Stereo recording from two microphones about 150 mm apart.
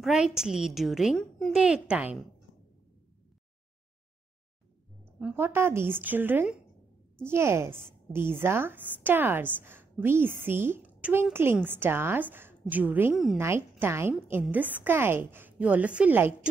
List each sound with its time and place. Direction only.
0.0 s a woman's voice: 5° right (ahead or behind)
5.2 s a woman's voice: 15° right (ahead or behind)
13.1 s a woman's voice: centre (ahead or behind)
13.4 s a woman's voice: 15° right (ahead or behind)